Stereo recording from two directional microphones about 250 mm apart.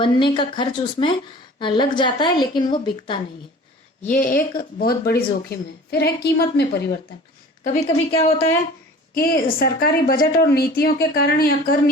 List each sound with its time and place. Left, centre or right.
0.0 s a woman's voice: centre
4.1 s speech: left
7.6 s a woman's voice: left
9.1 s speech: left